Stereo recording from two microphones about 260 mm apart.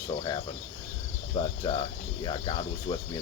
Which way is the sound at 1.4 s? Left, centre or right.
Centre.